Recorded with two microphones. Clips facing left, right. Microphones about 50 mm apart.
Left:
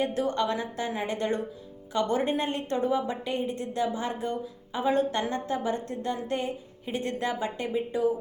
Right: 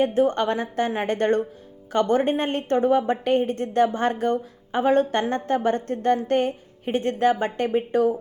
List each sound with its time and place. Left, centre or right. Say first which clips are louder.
0.0 s a woman's voice: right 7 dB; right